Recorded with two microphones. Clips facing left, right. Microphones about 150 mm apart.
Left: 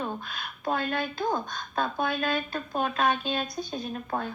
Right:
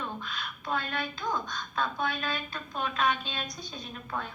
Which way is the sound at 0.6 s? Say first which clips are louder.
Left 5 dB; 45° left (ahead or behind).